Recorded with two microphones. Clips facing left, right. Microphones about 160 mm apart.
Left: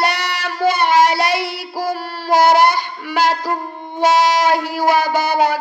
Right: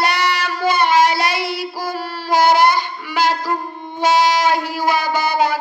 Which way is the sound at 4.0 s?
65° left (ahead or behind).